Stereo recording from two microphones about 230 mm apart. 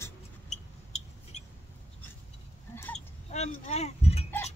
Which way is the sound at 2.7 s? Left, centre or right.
Centre.